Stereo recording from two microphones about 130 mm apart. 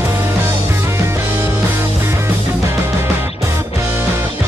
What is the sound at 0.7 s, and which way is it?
Music, 20° right (ahead or behind).